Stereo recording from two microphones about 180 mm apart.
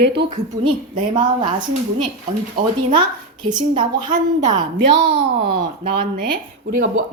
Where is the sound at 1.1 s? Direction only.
25° right (ahead or behind).